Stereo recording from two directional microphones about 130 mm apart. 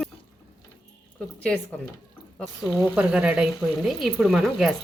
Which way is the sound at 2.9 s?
10° right (ahead or behind).